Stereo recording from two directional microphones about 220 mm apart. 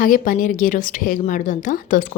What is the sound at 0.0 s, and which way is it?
Speech, 40° left (ahead or behind).